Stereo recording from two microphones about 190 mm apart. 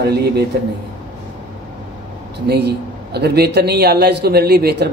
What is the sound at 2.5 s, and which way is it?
A man's voice, 60° right (ahead or behind).